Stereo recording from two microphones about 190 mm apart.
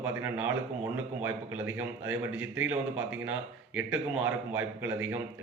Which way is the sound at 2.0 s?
10° right (ahead or behind).